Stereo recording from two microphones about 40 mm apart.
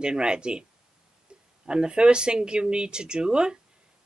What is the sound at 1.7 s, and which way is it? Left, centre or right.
Speech, right.